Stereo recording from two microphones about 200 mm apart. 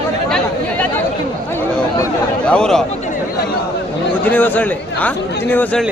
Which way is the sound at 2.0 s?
5° left (ahead or behind).